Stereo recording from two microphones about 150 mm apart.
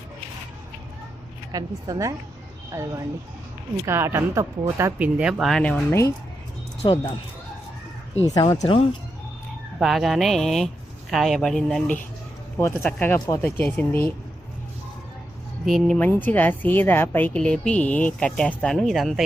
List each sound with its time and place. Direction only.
1.5 s speech: 20° right (ahead or behind); by 5.8 s 5° left (ahead or behind)
5.9 s speech: 20° left (ahead or behind)
6.8 s speech: 35° left (ahead or behind)
8.6 s speech: 35° left (ahead or behind)
9.8 s speech: centre (ahead or behind)
12.5 s a woman's voice: 15° left (ahead or behind)
15.6 s speech: centre (ahead or behind)
16.0 s a woman's voice: 10° left (ahead or behind)